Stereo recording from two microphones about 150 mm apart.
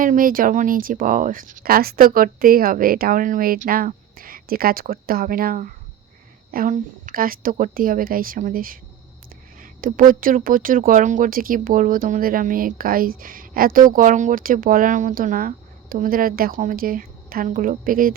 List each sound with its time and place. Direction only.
0.0 s speech: 65° right (ahead or behind)